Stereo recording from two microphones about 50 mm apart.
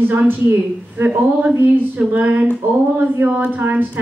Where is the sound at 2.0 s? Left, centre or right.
Right.